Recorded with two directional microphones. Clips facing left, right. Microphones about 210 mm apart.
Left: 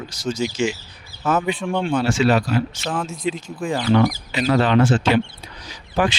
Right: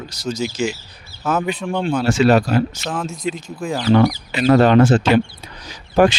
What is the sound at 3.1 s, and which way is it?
Speech, 45° right (ahead or behind).